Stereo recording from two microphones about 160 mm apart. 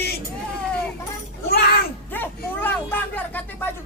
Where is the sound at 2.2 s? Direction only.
10° left (ahead or behind).